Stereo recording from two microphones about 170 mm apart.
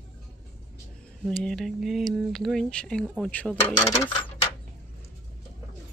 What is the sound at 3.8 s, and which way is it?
Speech, 15° left (ahead or behind).